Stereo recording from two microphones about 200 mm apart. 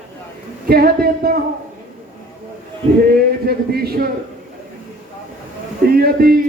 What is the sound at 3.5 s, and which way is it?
Speech, 50° right (ahead or behind).